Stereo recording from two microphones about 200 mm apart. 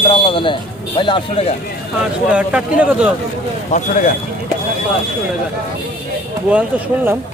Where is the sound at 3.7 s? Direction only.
40° left (ahead or behind).